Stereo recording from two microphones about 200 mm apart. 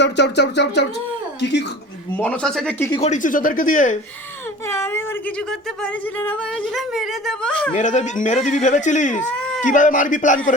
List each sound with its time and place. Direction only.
0.0 s a sound: 60° left (ahead or behind)
2.1 s speech: 5° left (ahead or behind)
2.9 s speech: 35° left (ahead or behind)
4.6 s speech: 10° left (ahead or behind)
7.8 s speech: 35° left (ahead or behind)
9.3 s a sound: 5° left (ahead or behind)
9.6 s speech: 40° left (ahead or behind)